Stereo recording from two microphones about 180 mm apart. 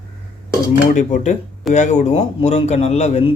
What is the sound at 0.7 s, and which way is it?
A man's voice, 45° left (ahead or behind).